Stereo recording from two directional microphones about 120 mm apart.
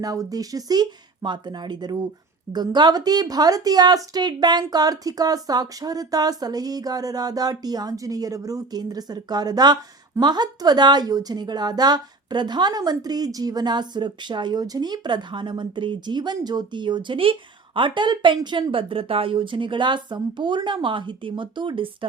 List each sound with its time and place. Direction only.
0.0 s speech: 30° right (ahead or behind)